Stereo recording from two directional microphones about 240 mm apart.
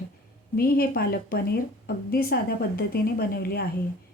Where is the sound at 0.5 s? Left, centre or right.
Left.